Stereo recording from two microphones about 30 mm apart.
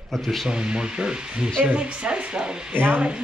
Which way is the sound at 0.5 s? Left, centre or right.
Right.